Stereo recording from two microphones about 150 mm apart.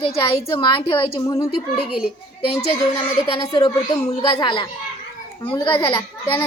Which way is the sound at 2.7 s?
40° left (ahead or behind).